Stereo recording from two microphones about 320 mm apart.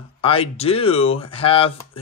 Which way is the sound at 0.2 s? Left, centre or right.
Centre.